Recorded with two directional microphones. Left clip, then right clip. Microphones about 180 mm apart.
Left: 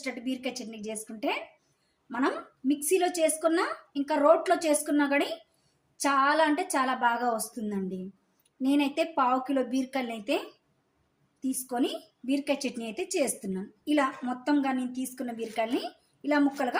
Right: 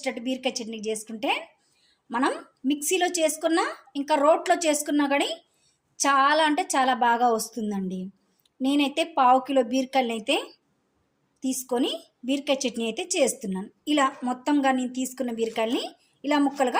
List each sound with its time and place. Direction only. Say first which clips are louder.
0.0 s a woman's voice: right 6 dB; 45° right (ahead or behind)